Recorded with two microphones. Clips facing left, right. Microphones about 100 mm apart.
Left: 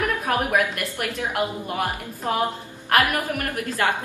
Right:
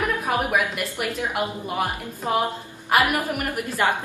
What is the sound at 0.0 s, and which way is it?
A woman's voice, 5° right (ahead or behind).